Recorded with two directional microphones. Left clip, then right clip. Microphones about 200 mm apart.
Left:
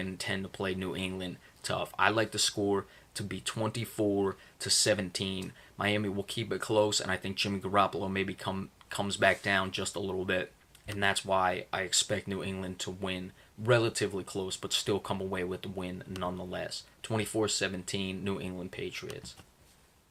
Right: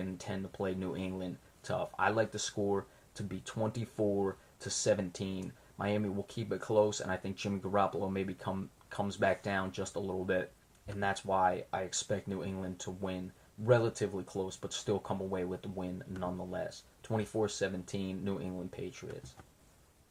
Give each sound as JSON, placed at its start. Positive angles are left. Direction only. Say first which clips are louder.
{"t": 0.2, "sound": "speech", "louder": "left 5 dB", "side_deg": 20}